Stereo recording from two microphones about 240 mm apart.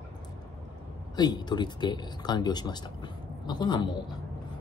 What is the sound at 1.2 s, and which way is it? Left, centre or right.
Speech, centre.